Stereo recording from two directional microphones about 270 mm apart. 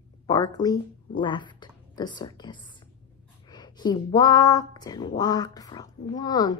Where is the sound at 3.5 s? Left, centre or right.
Centre.